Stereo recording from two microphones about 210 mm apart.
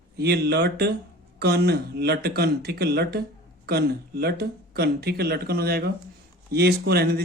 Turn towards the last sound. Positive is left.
turn(degrees=-50)  # may be behind; listen again after turning